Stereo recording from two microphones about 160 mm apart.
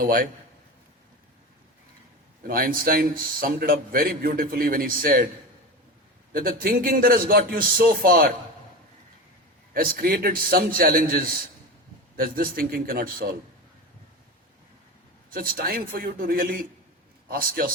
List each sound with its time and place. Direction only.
0.0 s a man's voice: 60° right (ahead or behind)
2.5 s a man's voice: 65° right (ahead or behind)
6.3 s a man's voice: 65° right (ahead or behind)
9.7 s a man's voice: 65° right (ahead or behind)
15.3 s a man's voice: 65° right (ahead or behind)